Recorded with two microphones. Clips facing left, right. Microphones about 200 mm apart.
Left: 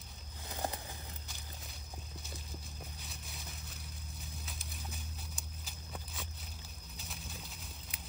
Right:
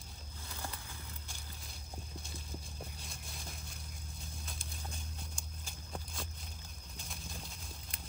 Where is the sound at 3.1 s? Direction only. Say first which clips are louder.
Even; centre (ahead or behind).